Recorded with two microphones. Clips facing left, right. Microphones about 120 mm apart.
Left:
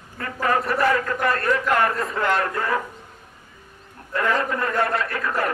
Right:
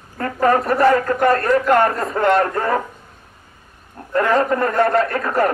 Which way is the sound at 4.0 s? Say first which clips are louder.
Right 9 dB; 40° right (ahead or behind).